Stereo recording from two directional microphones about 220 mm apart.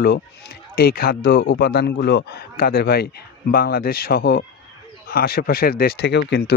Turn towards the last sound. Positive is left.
turn(degrees=50)  # may be behind; listen again after turning